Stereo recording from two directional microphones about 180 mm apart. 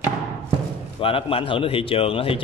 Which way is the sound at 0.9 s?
30° left (ahead or behind).